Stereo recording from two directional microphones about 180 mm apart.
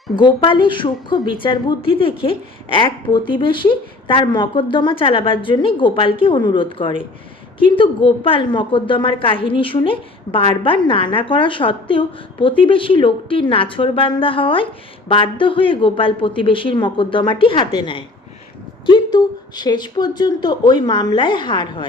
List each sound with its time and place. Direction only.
0.2 s a woman's voice: 25° left (ahead or behind)